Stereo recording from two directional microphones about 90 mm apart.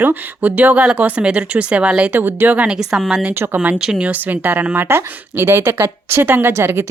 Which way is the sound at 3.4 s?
20° right (ahead or behind).